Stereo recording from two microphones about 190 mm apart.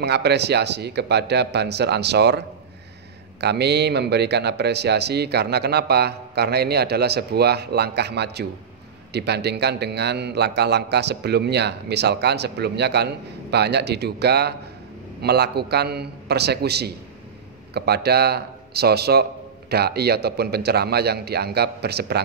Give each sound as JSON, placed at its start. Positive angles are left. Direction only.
{"t": 0.0, "sound": "a man's voice", "side_deg": -60}